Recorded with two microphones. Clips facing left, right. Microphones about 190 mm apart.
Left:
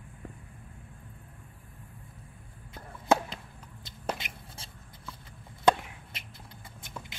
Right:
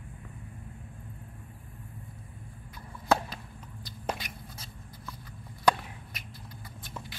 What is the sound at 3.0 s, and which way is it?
Whip, 25° left (ahead or behind).